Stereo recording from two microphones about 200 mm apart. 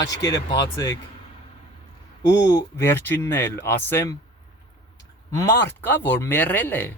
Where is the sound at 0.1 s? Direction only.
20° left (ahead or behind).